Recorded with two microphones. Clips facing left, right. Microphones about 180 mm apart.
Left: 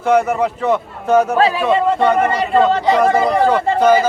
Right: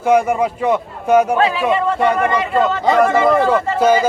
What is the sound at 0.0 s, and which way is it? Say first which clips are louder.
Speech: even; 10° right (ahead or behind).